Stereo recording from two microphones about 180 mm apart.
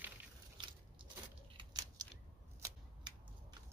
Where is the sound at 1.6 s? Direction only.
25° right (ahead or behind).